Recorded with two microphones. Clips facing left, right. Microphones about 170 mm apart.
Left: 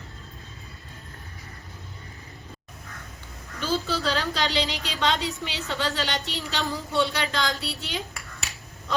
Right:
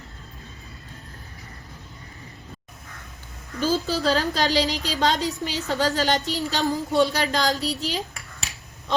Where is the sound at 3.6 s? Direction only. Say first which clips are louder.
Right 4 dB; 40° right (ahead or behind).